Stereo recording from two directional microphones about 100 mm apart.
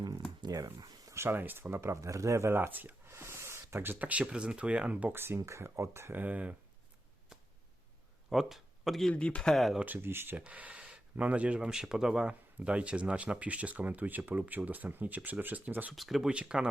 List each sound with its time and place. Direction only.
0.4 s a sound: 40° right (ahead or behind)
1.1 s speech: 25° right (ahead or behind)
3.1 s a sound: 25° right (ahead or behind)
3.9 s speech: 15° right (ahead or behind)
8.3 s speech: centre (ahead or behind)
9.8 s speech: 20° right (ahead or behind)
16.0 s speech: centre (ahead or behind)